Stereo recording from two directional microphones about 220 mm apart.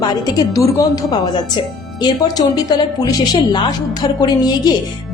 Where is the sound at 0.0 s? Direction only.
15° left (ahead or behind).